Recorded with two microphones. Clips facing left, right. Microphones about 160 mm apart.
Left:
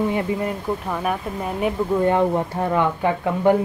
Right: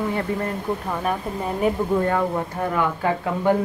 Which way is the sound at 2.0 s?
20° left (ahead or behind).